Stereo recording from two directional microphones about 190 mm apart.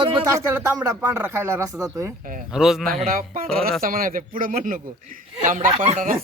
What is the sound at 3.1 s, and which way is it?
A man's voice, 50° right (ahead or behind).